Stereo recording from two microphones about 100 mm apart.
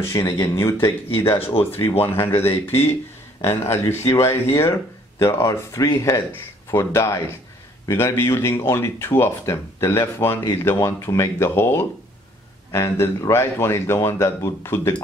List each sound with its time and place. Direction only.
0.1 s speech: 30° left (ahead or behind)